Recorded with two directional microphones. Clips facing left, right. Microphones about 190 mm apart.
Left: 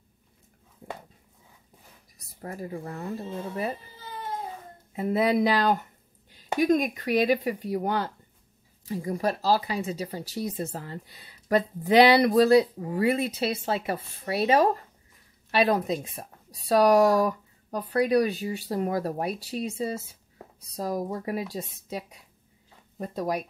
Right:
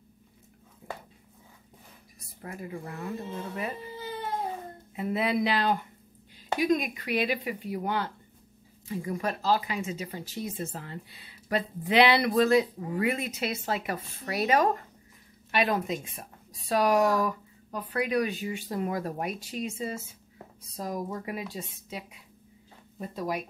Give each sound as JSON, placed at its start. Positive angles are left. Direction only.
{"t": 2.4, "sound": "speech", "side_deg": 35}
{"t": 4.9, "sound": "speech", "side_deg": 40}